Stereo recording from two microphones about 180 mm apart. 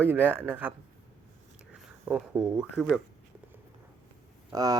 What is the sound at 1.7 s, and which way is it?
Speech, 5° right (ahead or behind).